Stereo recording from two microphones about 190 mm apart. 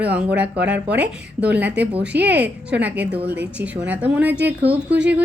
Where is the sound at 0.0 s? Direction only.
5° right (ahead or behind).